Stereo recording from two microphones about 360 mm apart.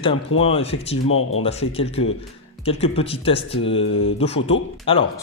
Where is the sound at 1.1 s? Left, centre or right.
Left.